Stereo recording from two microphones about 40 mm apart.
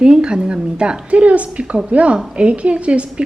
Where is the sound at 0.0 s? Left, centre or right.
Right.